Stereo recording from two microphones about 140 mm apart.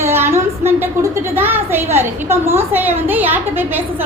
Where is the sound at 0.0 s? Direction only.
15° right (ahead or behind).